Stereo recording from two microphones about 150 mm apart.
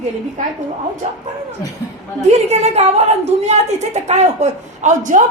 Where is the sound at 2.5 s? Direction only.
45° right (ahead or behind).